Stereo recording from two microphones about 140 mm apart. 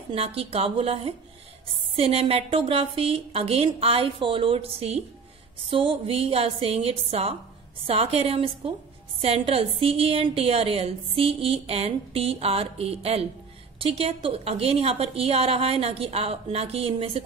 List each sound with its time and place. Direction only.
0.1 s a woman's voice: 45° right (ahead or behind)